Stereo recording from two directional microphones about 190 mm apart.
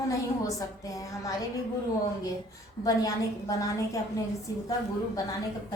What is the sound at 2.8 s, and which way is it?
Speech, 20° left (ahead or behind).